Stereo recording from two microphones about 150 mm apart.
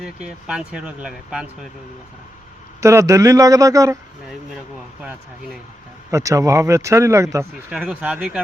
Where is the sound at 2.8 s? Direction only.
20° right (ahead or behind).